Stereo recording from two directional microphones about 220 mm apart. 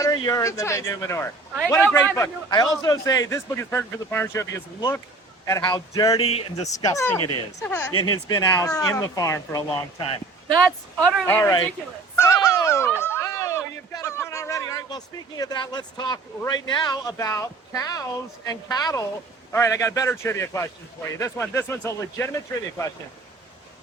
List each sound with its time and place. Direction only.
0.3 s a man's voice: 15° left (ahead or behind)
6.7 s a man's voice: 15° left (ahead or behind)
7.2 s speech: 90° left
7.6 s a man's voice: 10° left (ahead or behind)
7.9 s speech: 75° left (ahead or behind)
8.4 s a man's voice: 15° left (ahead or behind)
11.3 s a man's voice: 10° left (ahead or behind)
12.1 s a sound: 15° left (ahead or behind)
16.6 s a man's voice: 20° left (ahead or behind)